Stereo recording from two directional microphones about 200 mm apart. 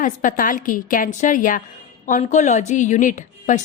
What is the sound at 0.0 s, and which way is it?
A woman's voice, 40° left (ahead or behind).